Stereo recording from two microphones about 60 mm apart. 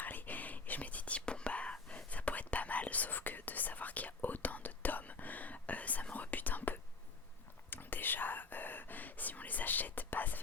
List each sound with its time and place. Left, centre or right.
0.0 s whispering: left